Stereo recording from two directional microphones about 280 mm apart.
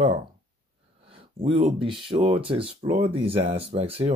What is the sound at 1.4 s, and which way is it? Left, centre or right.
Speech, centre.